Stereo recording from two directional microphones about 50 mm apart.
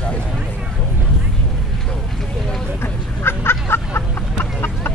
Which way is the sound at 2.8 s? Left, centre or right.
Left.